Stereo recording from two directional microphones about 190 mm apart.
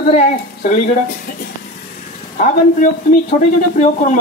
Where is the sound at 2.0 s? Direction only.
40° left (ahead or behind).